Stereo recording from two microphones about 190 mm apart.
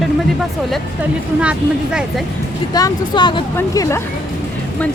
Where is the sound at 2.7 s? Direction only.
20° left (ahead or behind).